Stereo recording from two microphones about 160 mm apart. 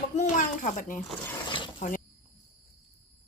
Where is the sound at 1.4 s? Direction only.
30° left (ahead or behind).